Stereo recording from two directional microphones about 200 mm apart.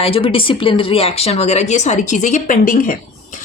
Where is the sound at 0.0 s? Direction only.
25° left (ahead or behind).